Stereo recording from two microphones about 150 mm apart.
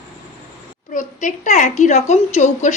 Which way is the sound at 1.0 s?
55° left (ahead or behind).